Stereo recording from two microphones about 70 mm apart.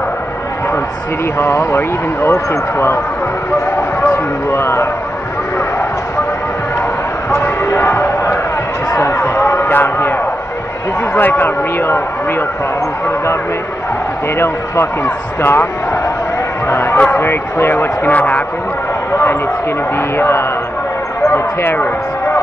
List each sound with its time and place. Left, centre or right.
1.7 s speech: left
4.1 s speech: left
7.6 s basketball bounce: left
8.9 s chatter: left
11.1 s speech: left
15.0 s speech: left
20.2 s a man's voice: left